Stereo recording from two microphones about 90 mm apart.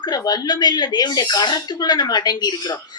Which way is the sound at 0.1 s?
45° left (ahead or behind).